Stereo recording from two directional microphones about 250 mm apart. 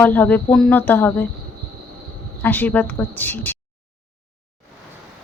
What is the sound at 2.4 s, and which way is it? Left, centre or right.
A woman's voice, centre.